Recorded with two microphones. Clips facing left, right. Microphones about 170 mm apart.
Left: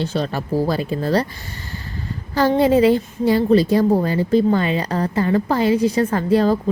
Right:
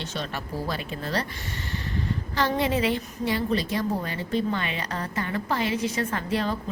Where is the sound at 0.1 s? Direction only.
40° left (ahead or behind).